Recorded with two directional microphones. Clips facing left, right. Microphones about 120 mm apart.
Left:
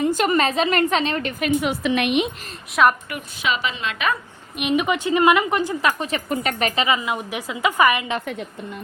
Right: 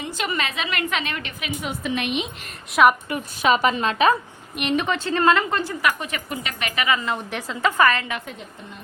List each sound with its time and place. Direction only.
0.0 s a woman's voice: 45° left (ahead or behind)
1.6 s a woman's voice: 75° left (ahead or behind)
2.8 s a woman's voice: centre (ahead or behind)
3.4 s a woman's voice: 45° right (ahead or behind)
4.5 s a woman's voice: 5° left (ahead or behind); by 6.8 s 35° left (ahead or behind)
7.0 s a woman's voice: 10° left (ahead or behind)